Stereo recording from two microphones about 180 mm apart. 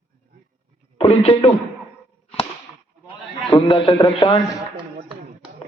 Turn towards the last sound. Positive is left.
turn(degrees=25)  # may be behind; listen again after turning